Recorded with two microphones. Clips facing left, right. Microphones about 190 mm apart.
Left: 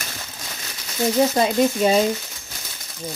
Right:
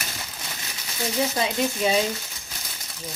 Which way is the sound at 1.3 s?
40° left (ahead or behind).